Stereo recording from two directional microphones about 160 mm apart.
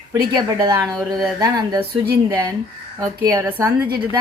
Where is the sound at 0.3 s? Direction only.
25° right (ahead or behind).